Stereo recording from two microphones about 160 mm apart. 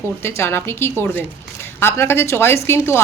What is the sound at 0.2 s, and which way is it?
A woman's voice, 15° left (ahead or behind).